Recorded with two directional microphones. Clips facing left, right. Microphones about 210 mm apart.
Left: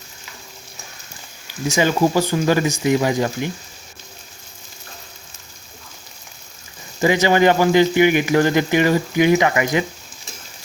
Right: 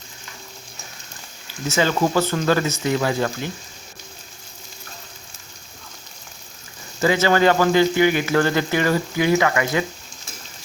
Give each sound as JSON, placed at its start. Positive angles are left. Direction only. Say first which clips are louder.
{"t": 1.6, "sound": "speech", "louder": "left 3 dB", "side_deg": 15}
{"t": 7.0, "sound": "speech", "louder": "left 2 dB", "side_deg": 15}